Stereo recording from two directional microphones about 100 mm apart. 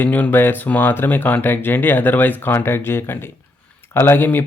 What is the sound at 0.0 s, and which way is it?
Speech, 20° left (ahead or behind).